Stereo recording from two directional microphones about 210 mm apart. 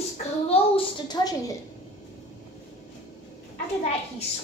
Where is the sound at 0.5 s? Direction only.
25° left (ahead or behind).